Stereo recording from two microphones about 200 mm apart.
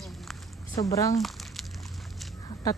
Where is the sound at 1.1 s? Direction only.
Centre (ahead or behind).